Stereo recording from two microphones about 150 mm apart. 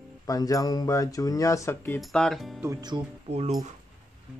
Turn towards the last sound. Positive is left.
turn(degrees=-45)  # may be behind; listen again after turning